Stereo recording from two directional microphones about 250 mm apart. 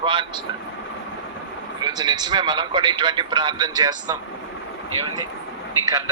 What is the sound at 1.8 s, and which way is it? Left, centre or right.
A man's voice, centre.